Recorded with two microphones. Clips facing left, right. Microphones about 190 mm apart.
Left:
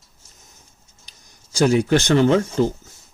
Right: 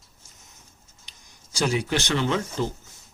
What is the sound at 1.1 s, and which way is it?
Speech, 45° left (ahead or behind).